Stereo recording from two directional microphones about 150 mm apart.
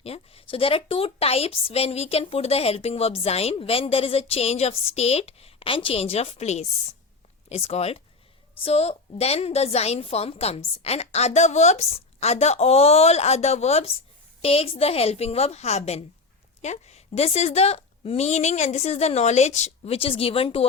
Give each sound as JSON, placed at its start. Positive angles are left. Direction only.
{"t": 0.0, "sound": "a woman's voice", "side_deg": 40}